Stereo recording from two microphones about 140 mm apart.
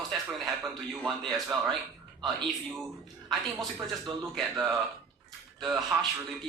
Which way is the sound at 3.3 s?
Centre (ahead or behind).